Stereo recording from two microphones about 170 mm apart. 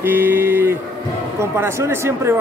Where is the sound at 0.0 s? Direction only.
15° right (ahead or behind).